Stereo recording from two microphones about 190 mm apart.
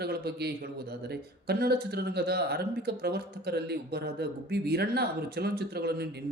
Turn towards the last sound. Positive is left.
turn(degrees=-60)  # may be behind; listen again after turning